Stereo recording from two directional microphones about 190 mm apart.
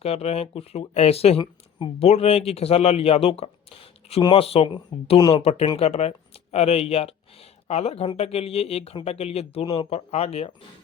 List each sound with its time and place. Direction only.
0.0 s speech: 35° left (ahead or behind)